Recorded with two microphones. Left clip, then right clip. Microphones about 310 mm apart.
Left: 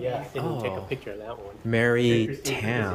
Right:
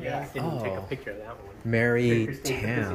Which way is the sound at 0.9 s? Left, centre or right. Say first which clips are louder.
Left 2 dB; left.